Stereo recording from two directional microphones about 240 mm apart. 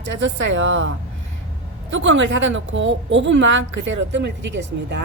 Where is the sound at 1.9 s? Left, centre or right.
Right.